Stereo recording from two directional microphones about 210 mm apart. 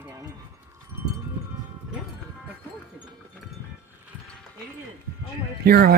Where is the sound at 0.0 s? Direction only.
15° right (ahead or behind).